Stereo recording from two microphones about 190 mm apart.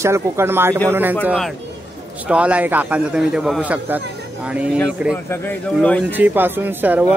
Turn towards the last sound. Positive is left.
turn(degrees=-10)  # may be behind; listen again after turning